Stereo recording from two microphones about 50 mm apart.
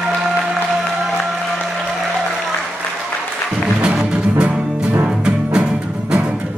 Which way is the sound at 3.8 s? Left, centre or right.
Right.